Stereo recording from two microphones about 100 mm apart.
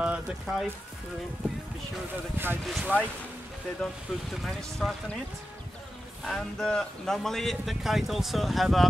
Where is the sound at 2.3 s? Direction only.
20° right (ahead or behind).